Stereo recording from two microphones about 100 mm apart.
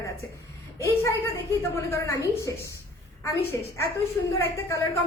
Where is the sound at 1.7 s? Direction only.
30° left (ahead or behind).